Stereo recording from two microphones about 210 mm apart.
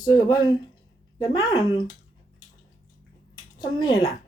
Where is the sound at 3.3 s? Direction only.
20° left (ahead or behind).